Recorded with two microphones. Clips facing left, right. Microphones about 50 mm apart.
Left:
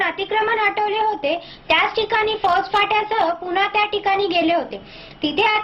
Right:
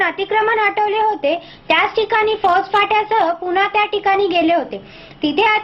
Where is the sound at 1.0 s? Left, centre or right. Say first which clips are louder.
Right 4 dB; right.